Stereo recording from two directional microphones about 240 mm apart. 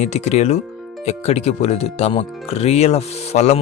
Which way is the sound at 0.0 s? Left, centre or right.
Left.